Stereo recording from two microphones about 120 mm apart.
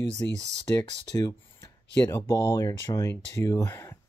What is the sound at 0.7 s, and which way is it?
Speech, 30° left (ahead or behind).